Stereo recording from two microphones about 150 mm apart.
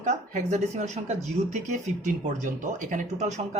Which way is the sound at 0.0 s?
50° right (ahead or behind).